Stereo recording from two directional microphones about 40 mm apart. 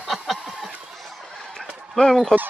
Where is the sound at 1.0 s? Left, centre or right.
Centre.